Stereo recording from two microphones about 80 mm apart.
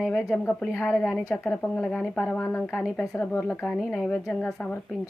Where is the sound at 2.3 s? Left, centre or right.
Left.